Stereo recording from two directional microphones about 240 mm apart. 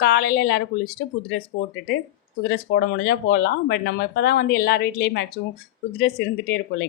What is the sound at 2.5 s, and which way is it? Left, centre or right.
A woman's voice, left.